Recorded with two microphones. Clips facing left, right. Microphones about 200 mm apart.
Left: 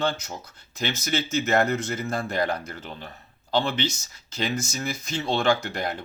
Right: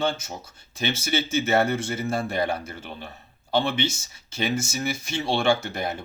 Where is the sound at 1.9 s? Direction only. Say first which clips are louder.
Right 2 dB; 25° right (ahead or behind).